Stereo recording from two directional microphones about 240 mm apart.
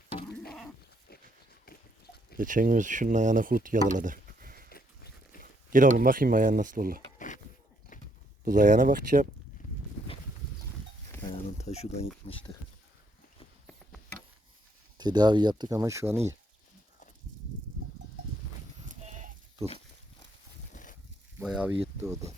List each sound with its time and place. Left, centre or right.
2.3 s speech: right
4.7 s walk: left
5.4 s speech: right
8.4 s speech: right
11.1 s a sound: centre
11.5 s a sound: left
12.2 s speech: left
14.9 s speech: centre
18.9 s sheep: right
20.7 s a sound: left
21.3 s a sound: centre
22.0 s speech: centre